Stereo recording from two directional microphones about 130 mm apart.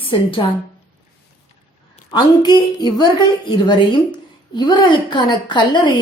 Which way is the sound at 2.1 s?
30° left (ahead or behind).